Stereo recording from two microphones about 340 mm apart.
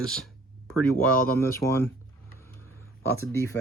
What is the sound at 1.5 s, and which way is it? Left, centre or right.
Speech, centre.